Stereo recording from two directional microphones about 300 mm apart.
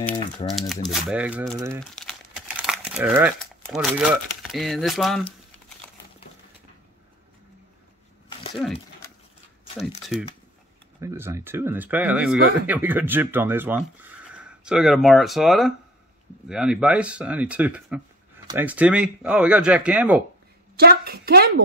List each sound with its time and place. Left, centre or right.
0.5 s speech: centre
9.8 s speech: centre
20.7 s a woman's voice: right